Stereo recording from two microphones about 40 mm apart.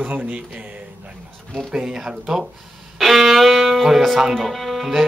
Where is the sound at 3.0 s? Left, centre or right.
Centre.